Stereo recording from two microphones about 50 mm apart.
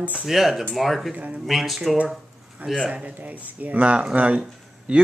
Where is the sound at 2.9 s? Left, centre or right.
Right.